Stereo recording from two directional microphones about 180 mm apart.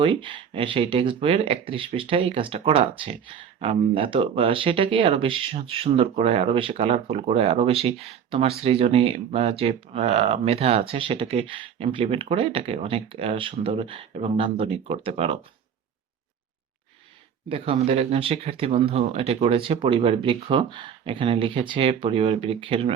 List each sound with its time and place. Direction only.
0.0 s speech: 30° right (ahead or behind)
17.5 s speech: 35° right (ahead or behind)